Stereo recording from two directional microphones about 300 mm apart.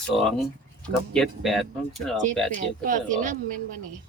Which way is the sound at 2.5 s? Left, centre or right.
Right.